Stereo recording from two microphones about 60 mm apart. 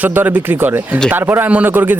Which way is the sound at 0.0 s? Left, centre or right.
Right.